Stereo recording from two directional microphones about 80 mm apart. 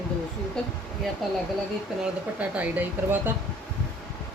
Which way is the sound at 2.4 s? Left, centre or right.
Right.